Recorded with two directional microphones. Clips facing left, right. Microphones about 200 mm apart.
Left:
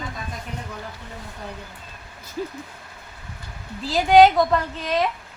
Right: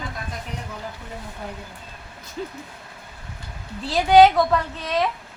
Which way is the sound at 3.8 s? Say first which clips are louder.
Even; centre (ahead or behind).